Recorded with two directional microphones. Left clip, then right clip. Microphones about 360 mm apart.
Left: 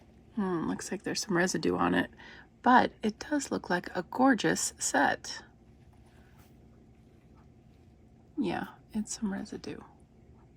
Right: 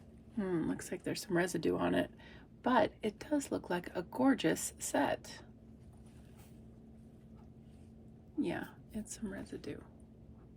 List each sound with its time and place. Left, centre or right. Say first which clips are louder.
0.3 s speech: left 4 dB; centre
8.4 s speech: left 5 dB; centre